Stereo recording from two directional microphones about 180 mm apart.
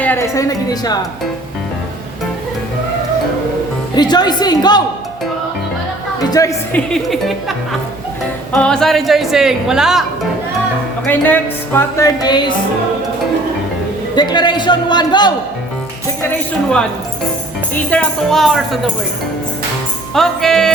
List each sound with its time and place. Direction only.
0.0 s a man's voice: 15° left (ahead or behind)
3.9 s a man's voice: 25° left (ahead or behind)
6.4 s a man's voice: 20° left (ahead or behind)
6.7 s speech: centre (ahead or behind)
8.5 s speech: 5° left (ahead or behind)
11.0 s a woman's voice: 10° left (ahead or behind)
14.2 s a man's voice: 25° left (ahead or behind)
17.9 s speech: centre (ahead or behind)
20.1 s speech: centre (ahead or behind)